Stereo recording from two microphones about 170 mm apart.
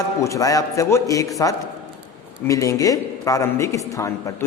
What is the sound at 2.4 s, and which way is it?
Speech, 20° left (ahead or behind).